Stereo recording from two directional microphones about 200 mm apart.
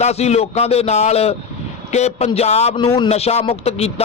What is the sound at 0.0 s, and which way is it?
Speech, 35° left (ahead or behind).